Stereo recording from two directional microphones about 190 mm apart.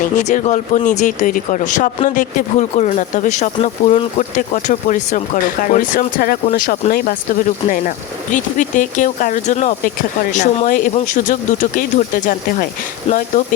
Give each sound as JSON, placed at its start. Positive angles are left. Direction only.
{"t": 0.2, "sound": "speech", "side_deg": 40}